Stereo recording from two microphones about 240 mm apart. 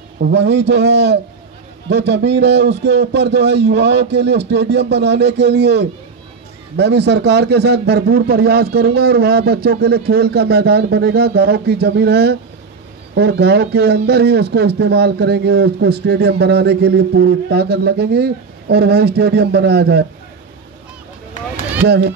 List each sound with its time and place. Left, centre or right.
0.2 s speech: right
21.8 s speech: right